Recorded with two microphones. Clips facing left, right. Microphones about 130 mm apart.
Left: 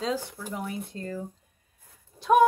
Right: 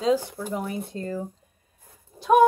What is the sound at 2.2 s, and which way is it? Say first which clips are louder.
Speech: right 2 dB; centre (ahead or behind).